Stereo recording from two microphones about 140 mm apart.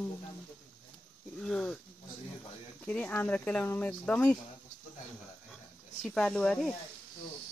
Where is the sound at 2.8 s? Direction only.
10° left (ahead or behind).